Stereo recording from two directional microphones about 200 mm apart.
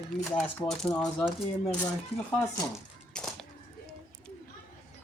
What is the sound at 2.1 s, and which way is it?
Speech, 30° left (ahead or behind).